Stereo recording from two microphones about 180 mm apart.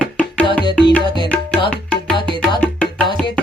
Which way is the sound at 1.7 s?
5° left (ahead or behind).